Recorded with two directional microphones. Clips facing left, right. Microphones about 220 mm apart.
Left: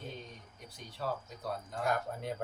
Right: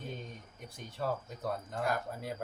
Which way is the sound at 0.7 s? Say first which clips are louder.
Right 4 dB; 50° right (ahead or behind).